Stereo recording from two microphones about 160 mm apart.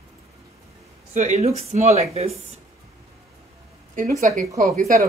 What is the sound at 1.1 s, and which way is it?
Speech, 50° right (ahead or behind).